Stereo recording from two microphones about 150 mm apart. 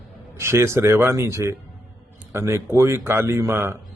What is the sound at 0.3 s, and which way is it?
Speech, 20° right (ahead or behind).